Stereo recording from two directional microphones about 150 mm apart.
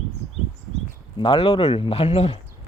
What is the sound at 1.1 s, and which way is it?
Speech, 35° left (ahead or behind).